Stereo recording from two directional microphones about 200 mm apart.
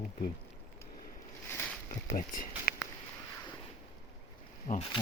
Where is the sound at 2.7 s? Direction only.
45° left (ahead or behind).